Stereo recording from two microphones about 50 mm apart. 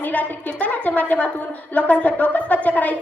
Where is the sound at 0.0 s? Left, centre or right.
Left.